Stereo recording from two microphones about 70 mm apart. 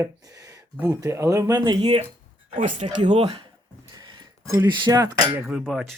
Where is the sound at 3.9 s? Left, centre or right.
Right.